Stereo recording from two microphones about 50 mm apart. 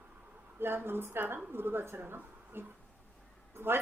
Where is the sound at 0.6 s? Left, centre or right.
Right.